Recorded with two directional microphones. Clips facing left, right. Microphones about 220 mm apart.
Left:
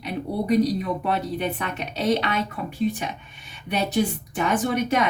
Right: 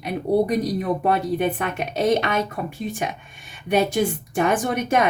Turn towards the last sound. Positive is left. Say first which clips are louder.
# right 2 dB
turn(degrees=-50)  # may be behind; listen again after turning